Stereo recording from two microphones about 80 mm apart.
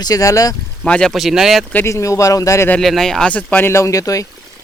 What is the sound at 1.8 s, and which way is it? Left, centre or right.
Speech, left.